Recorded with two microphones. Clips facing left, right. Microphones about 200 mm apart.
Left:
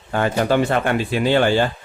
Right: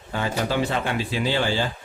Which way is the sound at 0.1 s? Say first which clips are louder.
Left 7 dB; 55° left (ahead or behind).